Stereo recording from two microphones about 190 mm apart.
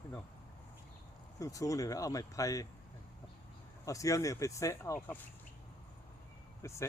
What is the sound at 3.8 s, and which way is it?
Speech, 15° left (ahead or behind).